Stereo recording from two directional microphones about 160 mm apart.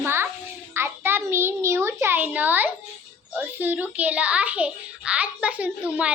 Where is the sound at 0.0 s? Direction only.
15° right (ahead or behind).